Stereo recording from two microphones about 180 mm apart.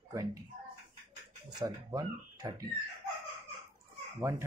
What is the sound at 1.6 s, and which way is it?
Speech, 20° right (ahead or behind).